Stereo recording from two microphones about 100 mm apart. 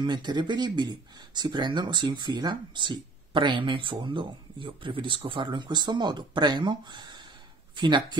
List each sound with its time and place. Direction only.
0.0 s speech: 45° right (ahead or behind)